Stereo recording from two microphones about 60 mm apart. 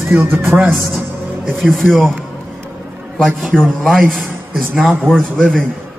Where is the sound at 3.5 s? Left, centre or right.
Centre.